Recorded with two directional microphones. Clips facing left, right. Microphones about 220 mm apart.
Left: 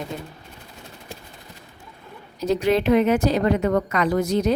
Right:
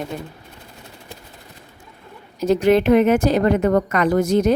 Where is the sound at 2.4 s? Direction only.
50° right (ahead or behind).